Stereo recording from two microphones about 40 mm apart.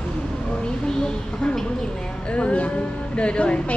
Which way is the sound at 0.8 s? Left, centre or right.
Left.